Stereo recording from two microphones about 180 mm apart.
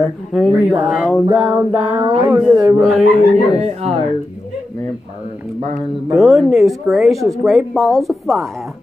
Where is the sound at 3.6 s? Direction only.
35° right (ahead or behind).